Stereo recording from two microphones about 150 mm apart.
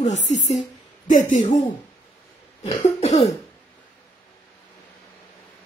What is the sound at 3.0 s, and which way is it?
Speech, 45° left (ahead or behind).